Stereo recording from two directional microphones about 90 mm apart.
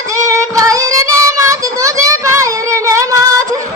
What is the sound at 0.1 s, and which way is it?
Child singing, 35° right (ahead or behind).